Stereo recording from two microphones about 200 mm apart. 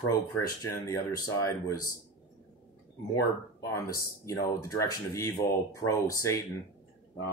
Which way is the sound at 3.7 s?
15° left (ahead or behind).